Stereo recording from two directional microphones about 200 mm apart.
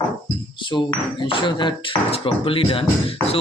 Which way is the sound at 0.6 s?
25° left (ahead or behind).